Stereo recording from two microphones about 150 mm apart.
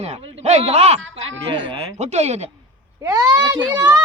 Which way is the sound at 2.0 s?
45° right (ahead or behind).